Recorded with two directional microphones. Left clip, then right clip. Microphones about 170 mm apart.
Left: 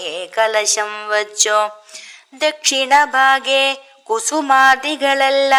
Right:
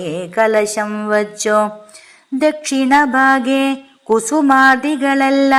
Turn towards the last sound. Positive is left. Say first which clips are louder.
# even
turn(degrees=35)  # may be behind; listen again after turning